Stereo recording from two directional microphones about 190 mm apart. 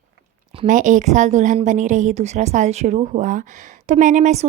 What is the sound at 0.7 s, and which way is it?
A woman's voice, 40° right (ahead or behind).